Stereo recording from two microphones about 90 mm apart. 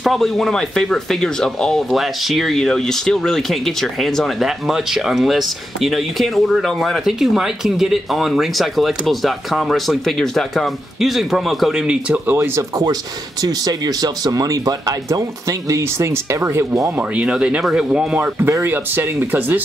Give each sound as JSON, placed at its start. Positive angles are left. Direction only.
{"t": 0.0, "sound": "speech", "side_deg": 0}
{"t": 12.3, "sound": "speech", "side_deg": -30}
{"t": 13.4, "sound": "speech", "side_deg": -45}
{"t": 16.9, "sound": "speech", "side_deg": -15}
{"t": 18.1, "sound": "speech", "side_deg": -20}